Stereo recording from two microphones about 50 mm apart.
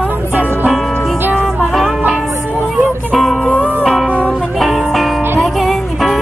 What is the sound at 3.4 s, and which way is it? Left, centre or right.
Music, left.